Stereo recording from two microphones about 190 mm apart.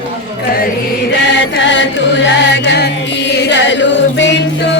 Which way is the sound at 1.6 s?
75° left (ahead or behind).